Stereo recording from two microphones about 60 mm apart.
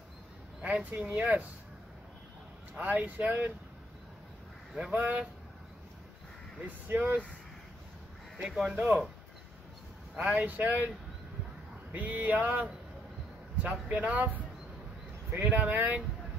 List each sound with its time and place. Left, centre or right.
0.6 s speech: right
2.7 s speech: right
4.7 s speech: centre
6.9 s speech: right
8.6 s speech: right
10.1 s speech: right
11.9 s speech: right